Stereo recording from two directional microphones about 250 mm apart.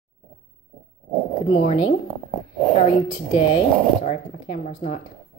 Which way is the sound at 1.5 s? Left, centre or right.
Left.